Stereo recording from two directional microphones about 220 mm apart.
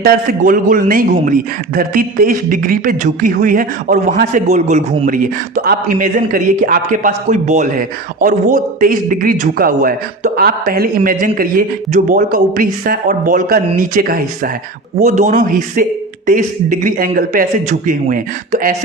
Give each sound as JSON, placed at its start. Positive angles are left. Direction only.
{"t": 0.0, "sound": "a man's voice", "side_deg": -40}